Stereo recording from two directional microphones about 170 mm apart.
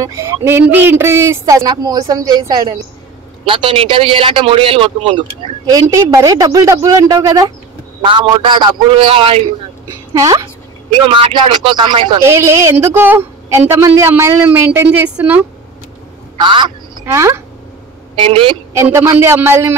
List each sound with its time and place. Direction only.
0.0 s a woman's voice: 15° right (ahead or behind)
5.7 s a woman's voice: 20° right (ahead or behind)
10.1 s a woman's voice: 20° right (ahead or behind)
12.3 s a woman's voice: 15° right (ahead or behind)
16.3 s speech: 30° right (ahead or behind)
17.0 s a woman's voice: 15° right (ahead or behind)
18.1 s a man's voice: 30° right (ahead or behind)
18.7 s a woman's voice: 15° right (ahead or behind)